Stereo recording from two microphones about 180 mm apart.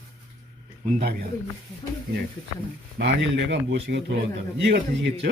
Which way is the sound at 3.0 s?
70° right (ahead or behind).